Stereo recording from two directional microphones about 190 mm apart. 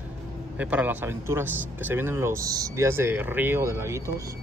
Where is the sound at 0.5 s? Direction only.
5° right (ahead or behind).